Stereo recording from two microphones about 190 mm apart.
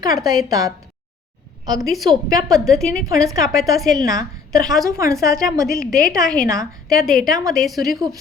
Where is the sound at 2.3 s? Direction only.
20° right (ahead or behind).